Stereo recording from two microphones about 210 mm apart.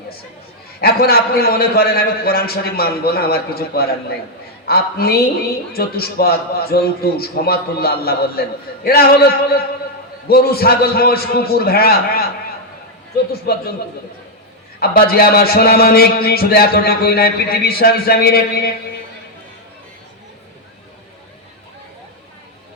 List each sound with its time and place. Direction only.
0.8 s a man's voice: 45° left (ahead or behind)
13.5 s a man's voice: 45° left (ahead or behind)
14.8 s a man's voice: 45° left (ahead or behind)